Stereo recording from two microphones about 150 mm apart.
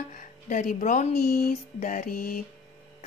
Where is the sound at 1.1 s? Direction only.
85° left.